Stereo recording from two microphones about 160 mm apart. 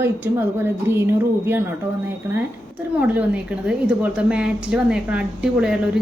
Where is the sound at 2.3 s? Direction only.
15° right (ahead or behind).